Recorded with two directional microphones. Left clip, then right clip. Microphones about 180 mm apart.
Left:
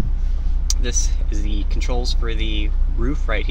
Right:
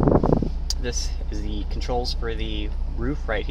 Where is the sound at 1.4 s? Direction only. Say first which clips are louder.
Left 1 dB; 5° left (ahead or behind).